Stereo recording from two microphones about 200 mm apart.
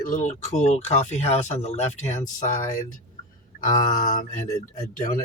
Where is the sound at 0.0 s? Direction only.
40° left (ahead or behind).